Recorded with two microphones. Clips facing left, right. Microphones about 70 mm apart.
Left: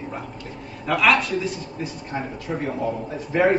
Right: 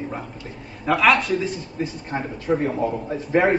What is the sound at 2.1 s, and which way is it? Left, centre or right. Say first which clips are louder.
Speech: right 6 dB; right.